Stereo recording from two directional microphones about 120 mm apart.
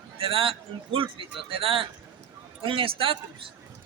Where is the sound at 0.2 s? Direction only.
50° right (ahead or behind).